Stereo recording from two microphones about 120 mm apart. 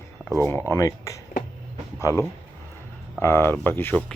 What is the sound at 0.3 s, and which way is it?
Speech, 20° left (ahead or behind).